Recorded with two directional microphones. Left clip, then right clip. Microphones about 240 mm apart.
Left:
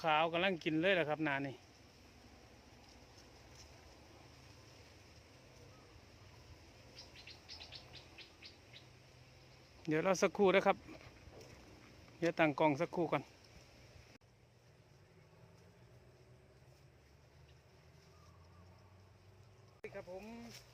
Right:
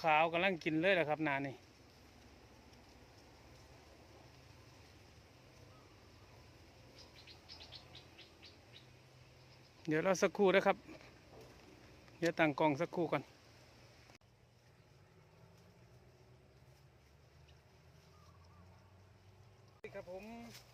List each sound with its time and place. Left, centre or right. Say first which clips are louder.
0.0 s speech: right 2 dB; centre
7.4 s bird: left 1 dB; left
9.8 s speech: even; centre
12.2 s speech: even; centre
19.8 s a sound: even; centre